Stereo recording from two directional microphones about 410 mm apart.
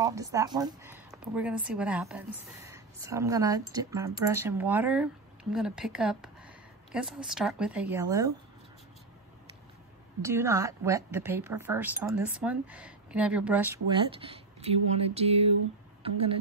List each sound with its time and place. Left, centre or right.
0.0 s speech: centre
10.2 s speech: centre
15.1 s a sound: centre
16.0 s speech: centre